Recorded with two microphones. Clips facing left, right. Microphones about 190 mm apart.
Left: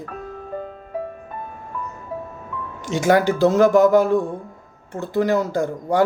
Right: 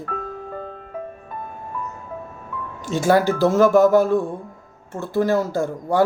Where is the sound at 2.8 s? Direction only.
15° left (ahead or behind).